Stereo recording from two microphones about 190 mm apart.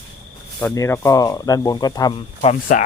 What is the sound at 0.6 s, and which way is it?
Speech, 15° left (ahead or behind).